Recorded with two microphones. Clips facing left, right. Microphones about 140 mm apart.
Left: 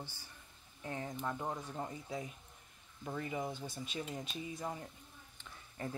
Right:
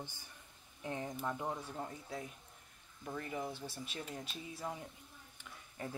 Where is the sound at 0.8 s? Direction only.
15° right (ahead or behind).